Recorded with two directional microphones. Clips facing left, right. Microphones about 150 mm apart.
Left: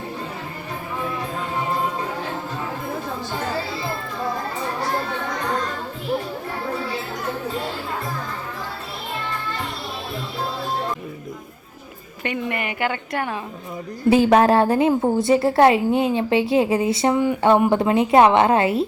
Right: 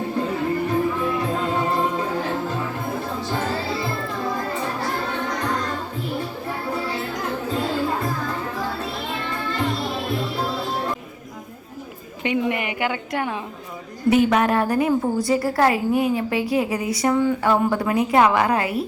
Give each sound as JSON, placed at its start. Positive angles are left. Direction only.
{"t": 12.2, "sound": "a woman's voice", "side_deg": -15}
{"t": 14.1, "sound": "a woman's voice", "side_deg": 30}